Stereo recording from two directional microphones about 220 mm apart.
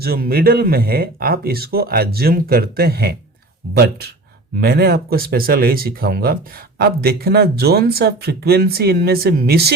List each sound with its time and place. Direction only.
0.0 s speech: 45° right (ahead or behind)
4.6 s speech: 45° right (ahead or behind)